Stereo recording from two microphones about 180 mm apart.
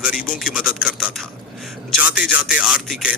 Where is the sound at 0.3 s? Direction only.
5° right (ahead or behind).